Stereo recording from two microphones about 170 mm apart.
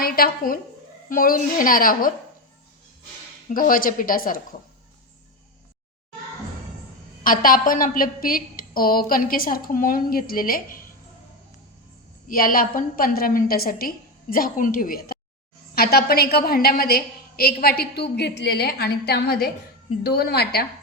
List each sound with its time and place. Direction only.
0.0 s a woman's voice: 60° left (ahead or behind)
3.5 s a woman's voice: 55° left (ahead or behind)
7.3 s a woman's voice: 55° left (ahead or behind)
12.3 s a woman's voice: 55° left (ahead or behind)